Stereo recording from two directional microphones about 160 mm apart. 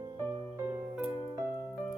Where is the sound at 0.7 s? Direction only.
10° right (ahead or behind).